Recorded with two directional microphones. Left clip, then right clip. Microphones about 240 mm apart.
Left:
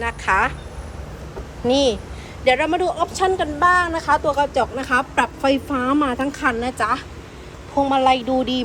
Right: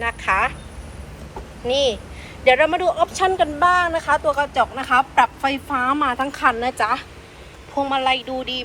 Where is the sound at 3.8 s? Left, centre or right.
Centre.